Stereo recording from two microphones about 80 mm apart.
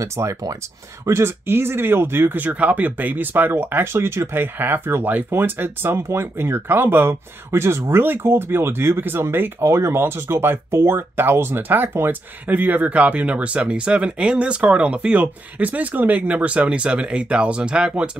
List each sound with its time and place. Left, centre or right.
0.0 s speech: right
1.0 s speech: right; by 18.1 s centre